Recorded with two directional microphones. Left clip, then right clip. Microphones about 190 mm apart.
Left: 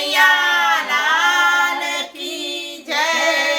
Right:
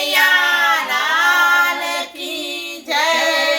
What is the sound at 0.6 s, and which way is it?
Child singing, 15° left (ahead or behind).